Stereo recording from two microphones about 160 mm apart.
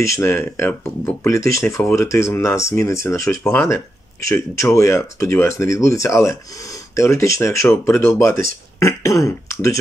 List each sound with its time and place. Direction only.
0.0 s speech: 15° left (ahead or behind)